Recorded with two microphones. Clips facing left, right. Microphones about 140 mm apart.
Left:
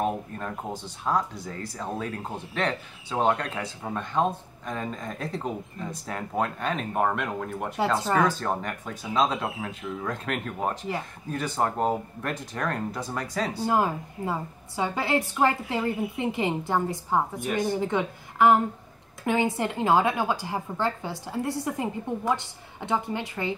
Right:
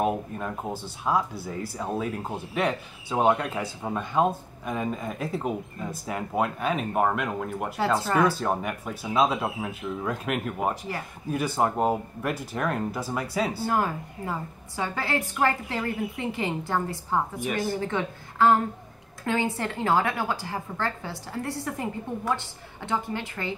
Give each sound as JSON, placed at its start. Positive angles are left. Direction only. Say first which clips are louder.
{"t": 0.0, "sound": "speech", "louder": "right 2 dB", "side_deg": -5}
{"t": 8.0, "sound": "a woman's voice", "louder": "right 1 dB", "side_deg": 15}
{"t": 8.3, "sound": "speech", "louder": "right 2 dB", "side_deg": -10}
{"t": 13.7, "sound": "a woman's voice", "louder": "left 2 dB", "side_deg": 15}